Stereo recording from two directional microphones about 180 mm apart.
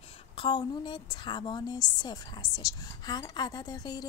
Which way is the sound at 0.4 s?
25° left (ahead or behind).